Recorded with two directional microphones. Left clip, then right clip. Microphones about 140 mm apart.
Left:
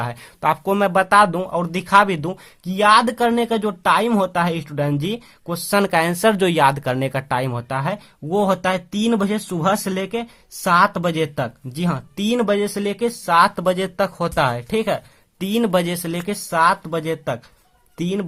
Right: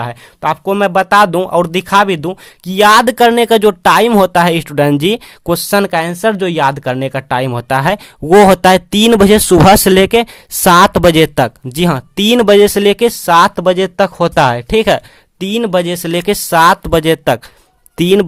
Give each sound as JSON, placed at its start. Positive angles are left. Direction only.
{"t": 0.0, "sound": "speech", "side_deg": -30}
{"t": 2.6, "sound": "speech", "side_deg": -50}
{"t": 5.7, "sound": "speech", "side_deg": -25}
{"t": 7.7, "sound": "speech", "side_deg": -50}
{"t": 8.3, "sound": "speech", "side_deg": -70}
{"t": 15.4, "sound": "speech", "side_deg": -35}